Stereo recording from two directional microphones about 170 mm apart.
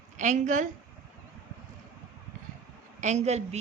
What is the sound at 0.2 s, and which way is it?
Speech, 45° right (ahead or behind).